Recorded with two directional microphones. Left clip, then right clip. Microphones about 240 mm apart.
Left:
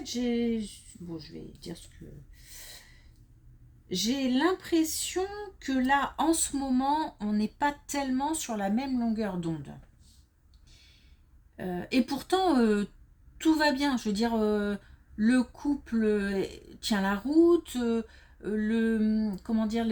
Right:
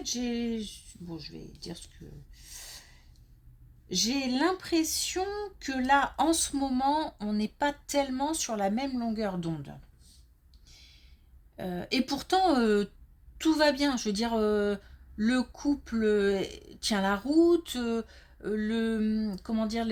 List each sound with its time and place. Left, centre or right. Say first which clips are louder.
0.1 s speech: left 3 dB; right
3.8 s speech: even; right
11.5 s speech: left 1 dB; right